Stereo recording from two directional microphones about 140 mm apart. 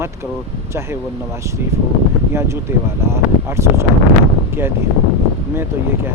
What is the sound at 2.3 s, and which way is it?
Speech, 20° right (ahead or behind).